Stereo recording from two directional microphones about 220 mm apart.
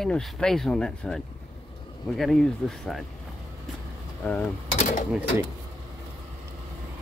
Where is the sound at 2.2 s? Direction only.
Centre (ahead or behind).